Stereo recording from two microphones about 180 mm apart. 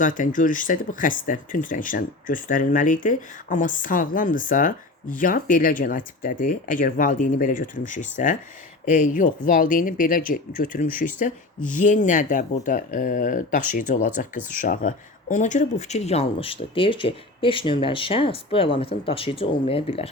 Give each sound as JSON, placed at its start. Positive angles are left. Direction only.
{"t": 0.0, "sound": "speech", "side_deg": 45}